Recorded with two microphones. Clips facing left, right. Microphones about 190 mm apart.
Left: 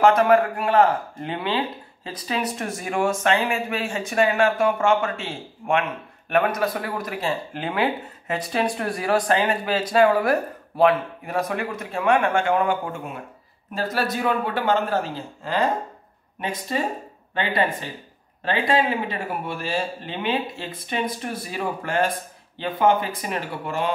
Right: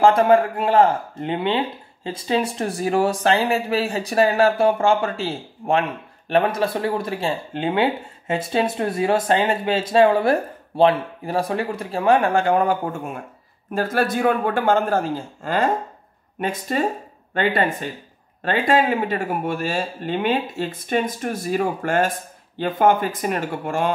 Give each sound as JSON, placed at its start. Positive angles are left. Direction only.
{"t": 0.0, "sound": "a man's voice", "side_deg": -30}